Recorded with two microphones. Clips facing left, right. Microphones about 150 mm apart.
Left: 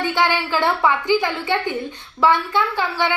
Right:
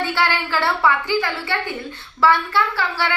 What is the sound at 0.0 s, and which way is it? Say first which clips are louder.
A woman's voice: left 2 dB; 15° left (ahead or behind).